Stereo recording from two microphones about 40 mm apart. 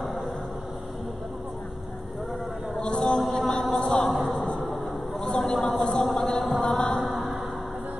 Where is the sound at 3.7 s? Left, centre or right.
Centre.